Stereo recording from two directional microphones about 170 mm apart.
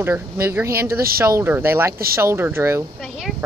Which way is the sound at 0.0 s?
15° right (ahead or behind).